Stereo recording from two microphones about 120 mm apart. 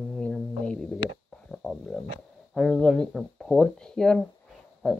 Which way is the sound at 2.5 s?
Centre (ahead or behind).